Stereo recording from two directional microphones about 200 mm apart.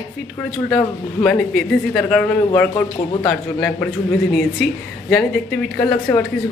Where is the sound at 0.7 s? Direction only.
5° left (ahead or behind).